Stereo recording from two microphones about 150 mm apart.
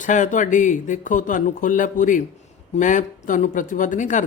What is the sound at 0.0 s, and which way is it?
Speech, 55° left (ahead or behind).